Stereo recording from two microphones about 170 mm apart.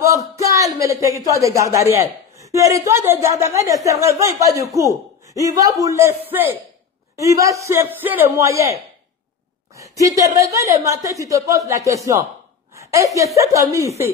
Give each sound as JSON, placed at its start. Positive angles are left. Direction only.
{"t": 0.4, "sound": "a sound", "side_deg": -20}
{"t": 0.7, "sound": "a woman's voice", "side_deg": -20}
{"t": 9.8, "sound": "a woman's voice", "side_deg": -20}